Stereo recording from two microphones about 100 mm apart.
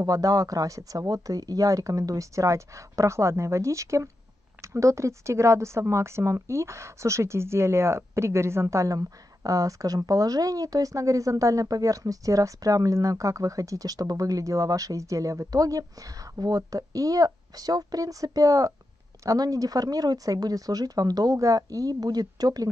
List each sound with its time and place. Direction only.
0.0 s a woman's voice: 35° right (ahead or behind)